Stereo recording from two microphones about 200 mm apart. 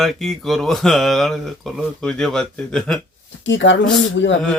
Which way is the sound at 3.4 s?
65° left (ahead or behind).